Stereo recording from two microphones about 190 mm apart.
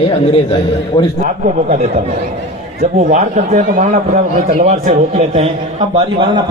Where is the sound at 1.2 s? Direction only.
35° right (ahead or behind).